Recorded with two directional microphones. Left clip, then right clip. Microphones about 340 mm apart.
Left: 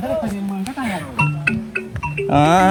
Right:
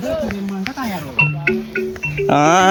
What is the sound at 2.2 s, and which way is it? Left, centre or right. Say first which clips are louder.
Speech: right 1 dB; centre.